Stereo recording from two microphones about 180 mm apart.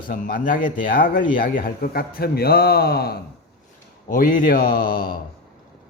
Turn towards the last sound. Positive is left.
turn(degrees=55)  # may be behind; listen again after turning